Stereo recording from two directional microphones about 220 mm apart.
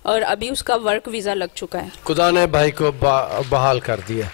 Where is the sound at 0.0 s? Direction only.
15° left (ahead or behind).